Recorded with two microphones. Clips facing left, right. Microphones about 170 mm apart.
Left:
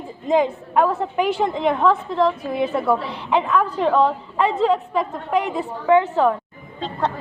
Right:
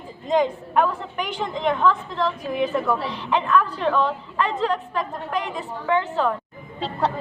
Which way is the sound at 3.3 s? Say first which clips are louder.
Left 2 dB; 10° left (ahead or behind).